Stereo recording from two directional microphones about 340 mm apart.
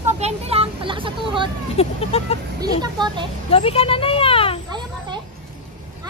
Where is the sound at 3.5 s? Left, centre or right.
Centre.